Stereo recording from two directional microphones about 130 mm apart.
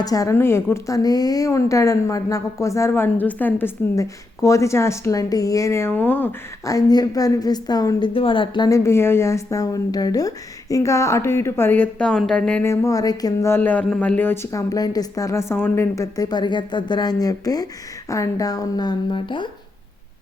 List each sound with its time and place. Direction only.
0.0 s a woman's voice: 25° left (ahead or behind)
3.9 s a woman's voice: 25° left (ahead or behind)
6.7 s a woman's voice: 30° left (ahead or behind); by 12.6 s 10° left (ahead or behind)
12.6 s a woman's voice: 20° left (ahead or behind)
13.5 s a woman's voice: 10° left (ahead or behind); by 19.5 s 40° left (ahead or behind)